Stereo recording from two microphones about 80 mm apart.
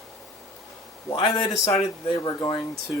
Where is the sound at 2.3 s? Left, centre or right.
Left.